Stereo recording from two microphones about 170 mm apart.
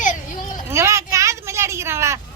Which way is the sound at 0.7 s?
15° right (ahead or behind).